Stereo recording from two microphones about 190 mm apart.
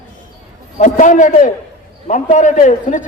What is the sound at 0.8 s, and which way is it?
A man's voice, 40° left (ahead or behind).